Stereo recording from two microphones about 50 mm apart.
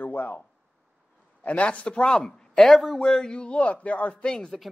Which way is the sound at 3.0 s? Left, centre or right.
Centre.